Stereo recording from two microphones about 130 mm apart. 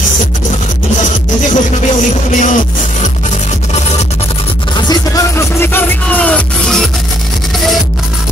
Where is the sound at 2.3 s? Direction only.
75° left (ahead or behind).